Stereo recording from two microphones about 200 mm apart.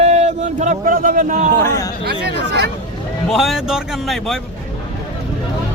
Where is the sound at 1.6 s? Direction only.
15° left (ahead or behind).